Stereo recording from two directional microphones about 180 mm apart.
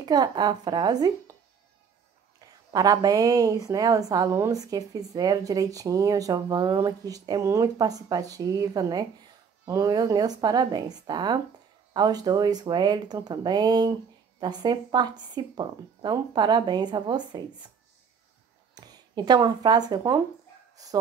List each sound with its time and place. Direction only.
0.0 s a woman's voice: 25° right (ahead or behind)
2.7 s a woman's voice: 20° right (ahead or behind)
18.8 s speech: 25° right (ahead or behind)